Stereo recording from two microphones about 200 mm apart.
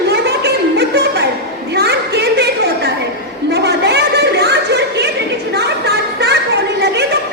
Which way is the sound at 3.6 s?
55° right (ahead or behind).